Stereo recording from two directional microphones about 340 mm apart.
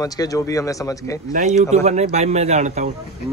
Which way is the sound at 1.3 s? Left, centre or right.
Right.